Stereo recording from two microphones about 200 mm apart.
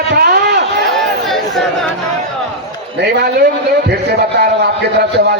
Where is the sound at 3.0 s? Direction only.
55° right (ahead or behind).